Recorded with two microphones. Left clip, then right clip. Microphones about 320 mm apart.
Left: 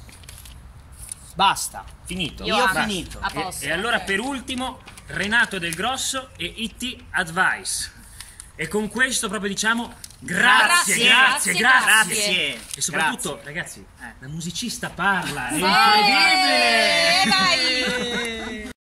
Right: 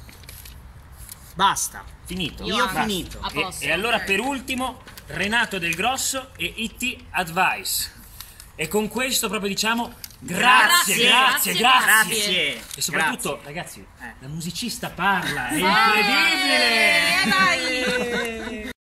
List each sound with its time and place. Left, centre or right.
1.3 s speech: centre
2.4 s speech: left
3.6 s speech: centre
7.6 s a sound: centre
8.5 s speech: centre
17.6 s a sound: centre